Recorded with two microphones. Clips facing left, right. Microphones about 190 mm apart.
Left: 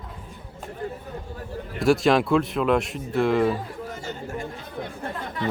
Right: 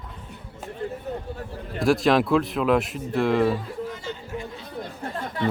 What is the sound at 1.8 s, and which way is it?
Speech, centre (ahead or behind).